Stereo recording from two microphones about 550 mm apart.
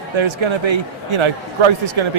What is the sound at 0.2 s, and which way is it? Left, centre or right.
Speech, right.